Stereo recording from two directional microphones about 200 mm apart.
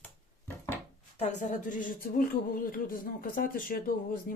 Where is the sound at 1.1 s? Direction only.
35° left (ahead or behind).